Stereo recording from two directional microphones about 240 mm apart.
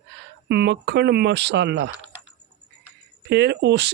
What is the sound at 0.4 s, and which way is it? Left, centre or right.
Speech, right.